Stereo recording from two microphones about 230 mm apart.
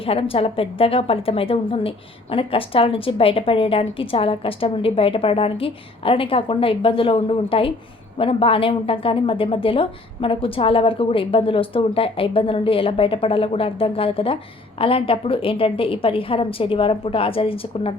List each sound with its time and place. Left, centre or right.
0.0 s a woman's voice: left